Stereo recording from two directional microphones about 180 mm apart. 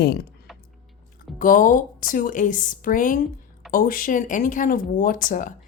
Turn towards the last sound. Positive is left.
turn(degrees=45)  # may be behind; listen again after turning